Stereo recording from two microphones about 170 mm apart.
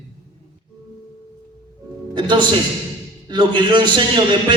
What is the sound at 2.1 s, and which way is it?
A man's voice, 25° right (ahead or behind).